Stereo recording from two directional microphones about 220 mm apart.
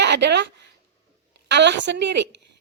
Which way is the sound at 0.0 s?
50° right (ahead or behind).